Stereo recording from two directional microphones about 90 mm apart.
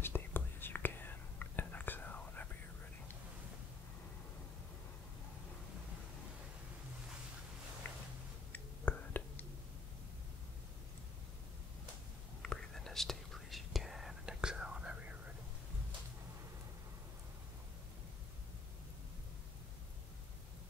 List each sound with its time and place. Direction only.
0.0 s whispering: 25° left (ahead or behind)
7.8 s a sound: 25° left (ahead or behind)
8.5 s whispering: 20° left (ahead or behind)
12.4 s whispering: 5° left (ahead or behind); by 15.3 s 15° right (ahead or behind)